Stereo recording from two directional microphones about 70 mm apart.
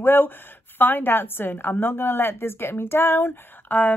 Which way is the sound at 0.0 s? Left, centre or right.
Left.